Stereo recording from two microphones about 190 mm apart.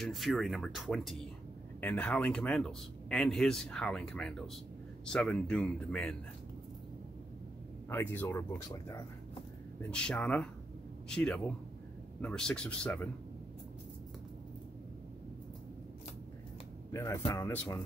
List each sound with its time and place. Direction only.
0.0 s a man's voice: centre (ahead or behind)
7.9 s a man's voice: 10° left (ahead or behind)
16.9 s speech: 15° left (ahead or behind)